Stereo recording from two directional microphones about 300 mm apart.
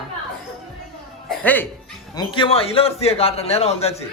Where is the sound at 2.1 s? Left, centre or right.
Centre.